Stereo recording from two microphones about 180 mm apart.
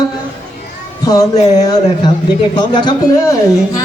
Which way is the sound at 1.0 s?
20° left (ahead or behind).